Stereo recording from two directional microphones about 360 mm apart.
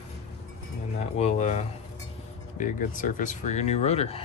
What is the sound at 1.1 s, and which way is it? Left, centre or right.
Speech, centre.